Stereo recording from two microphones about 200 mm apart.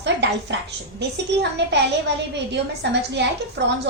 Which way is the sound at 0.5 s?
60° right (ahead or behind).